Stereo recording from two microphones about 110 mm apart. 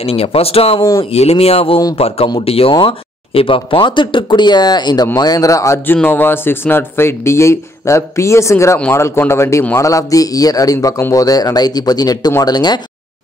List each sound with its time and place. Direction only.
0.0 s speech: 60° left (ahead or behind)
2.7 s speech: 50° left (ahead or behind); by 5.8 s 30° left (ahead or behind)
6.0 s speech: 20° left (ahead or behind); by 12.8 s 40° left (ahead or behind)